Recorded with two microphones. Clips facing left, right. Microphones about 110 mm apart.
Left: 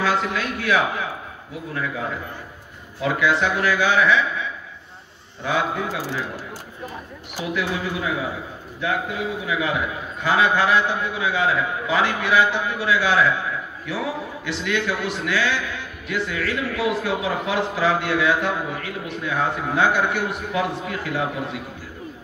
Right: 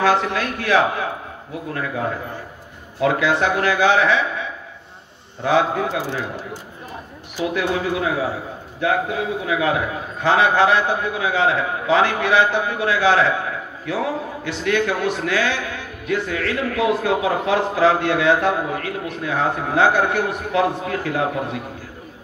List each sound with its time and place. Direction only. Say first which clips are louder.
0.0 s a man's voice: right 4 dB; 45° right (ahead or behind)
7.5 s a man's voice: right 3 dB; 50° right (ahead or behind)